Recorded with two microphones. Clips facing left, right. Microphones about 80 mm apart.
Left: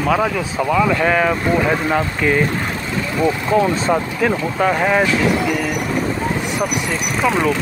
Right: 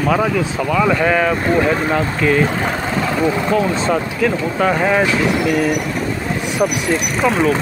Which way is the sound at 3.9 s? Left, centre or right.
Centre.